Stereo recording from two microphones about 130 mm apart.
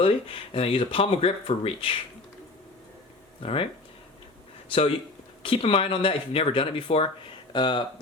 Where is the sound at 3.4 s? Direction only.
45° left (ahead or behind).